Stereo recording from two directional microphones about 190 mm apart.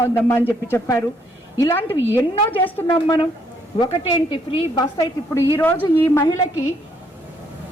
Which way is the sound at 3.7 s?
25° left (ahead or behind).